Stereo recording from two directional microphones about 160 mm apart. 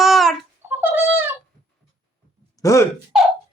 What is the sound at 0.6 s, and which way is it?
Cat, 10° right (ahead or behind).